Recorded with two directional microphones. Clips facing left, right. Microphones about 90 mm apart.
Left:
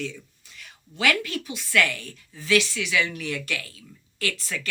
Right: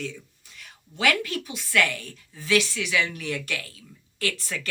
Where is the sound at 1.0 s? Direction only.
35° right (ahead or behind).